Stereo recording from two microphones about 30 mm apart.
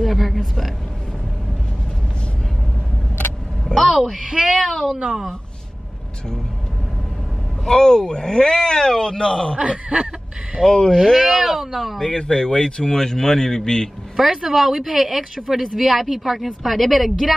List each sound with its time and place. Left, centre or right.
0.0 s a sound: centre
3.6 s speech: centre
4.2 s speech: centre
4.6 s speech: centre
5.0 s speech: centre
7.6 s speech: left
9.6 s a sound: right
10.6 s speech: right
11.1 s a woman's voice: centre
12.2 s speech: left
12.9 s speech: centre
14.1 s a woman's voice: centre